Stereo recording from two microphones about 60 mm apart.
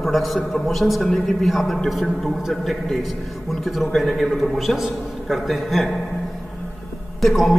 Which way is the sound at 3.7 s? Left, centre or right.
Centre.